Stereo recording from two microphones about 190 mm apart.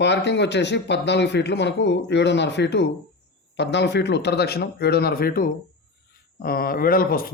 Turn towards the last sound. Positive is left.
turn(degrees=50)  # may be behind; listen again after turning